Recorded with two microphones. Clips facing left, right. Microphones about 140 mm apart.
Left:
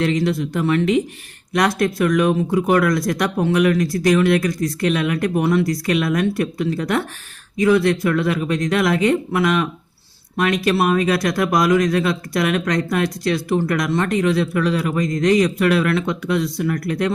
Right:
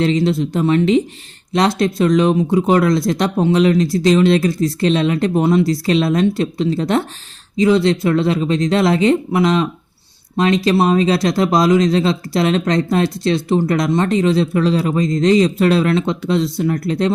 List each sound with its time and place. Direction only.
0.0 s speech: 25° right (ahead or behind)